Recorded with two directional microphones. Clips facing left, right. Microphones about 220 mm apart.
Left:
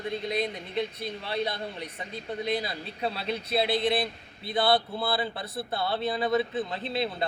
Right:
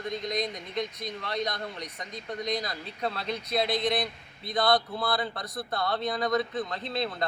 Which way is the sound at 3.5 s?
30° left (ahead or behind).